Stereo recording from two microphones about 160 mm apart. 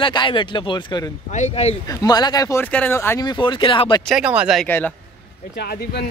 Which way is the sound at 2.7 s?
10° left (ahead or behind).